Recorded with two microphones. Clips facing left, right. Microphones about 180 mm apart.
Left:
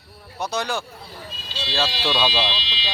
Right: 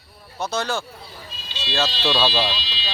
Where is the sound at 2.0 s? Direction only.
5° right (ahead or behind).